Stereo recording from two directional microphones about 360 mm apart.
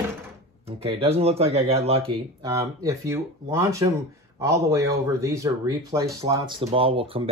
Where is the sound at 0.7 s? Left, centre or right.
Centre.